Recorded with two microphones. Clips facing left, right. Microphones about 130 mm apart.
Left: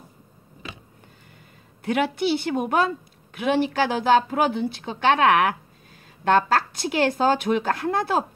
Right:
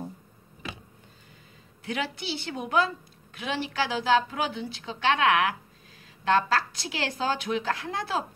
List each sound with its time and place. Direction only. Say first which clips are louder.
1.9 s a woman's voice: left 10 dB; 55° left (ahead or behind)